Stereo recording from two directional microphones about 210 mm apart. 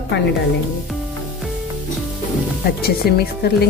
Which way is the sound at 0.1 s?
55° left (ahead or behind).